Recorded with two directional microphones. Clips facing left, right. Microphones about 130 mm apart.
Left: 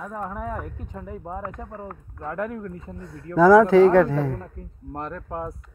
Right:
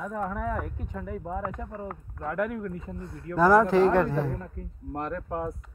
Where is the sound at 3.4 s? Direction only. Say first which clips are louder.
Left 6 dB; 90° left.